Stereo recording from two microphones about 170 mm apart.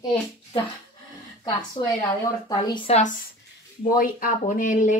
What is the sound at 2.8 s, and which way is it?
Speech, 40° left (ahead or behind).